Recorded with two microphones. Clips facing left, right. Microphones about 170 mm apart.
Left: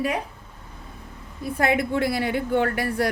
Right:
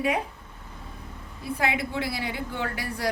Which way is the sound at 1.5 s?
50° left (ahead or behind).